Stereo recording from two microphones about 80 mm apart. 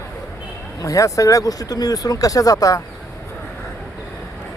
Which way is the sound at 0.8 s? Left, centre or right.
Left.